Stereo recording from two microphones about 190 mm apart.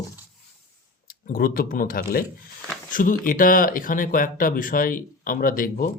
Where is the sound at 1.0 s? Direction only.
50° left (ahead or behind).